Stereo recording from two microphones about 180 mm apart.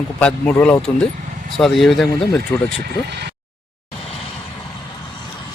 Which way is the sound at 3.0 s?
70° right (ahead or behind).